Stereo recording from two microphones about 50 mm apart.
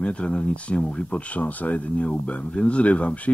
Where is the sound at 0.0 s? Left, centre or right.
Left.